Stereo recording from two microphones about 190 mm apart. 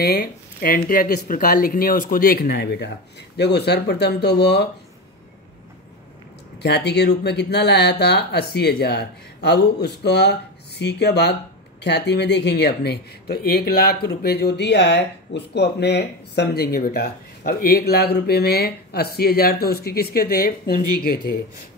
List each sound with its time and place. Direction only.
0.0 s speech: 55° left (ahead or behind)
6.6 s speech: 60° left (ahead or behind)